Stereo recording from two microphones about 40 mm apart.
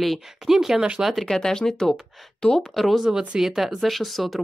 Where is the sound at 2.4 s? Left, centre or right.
Centre.